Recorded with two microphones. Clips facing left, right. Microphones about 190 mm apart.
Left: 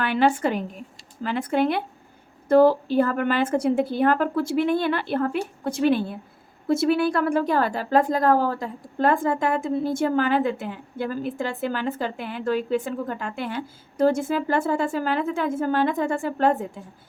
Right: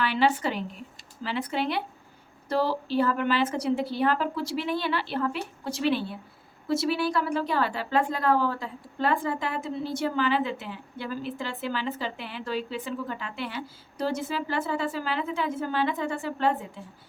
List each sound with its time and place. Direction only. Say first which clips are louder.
0.0 s speech: left 4 dB; 50° left (ahead or behind)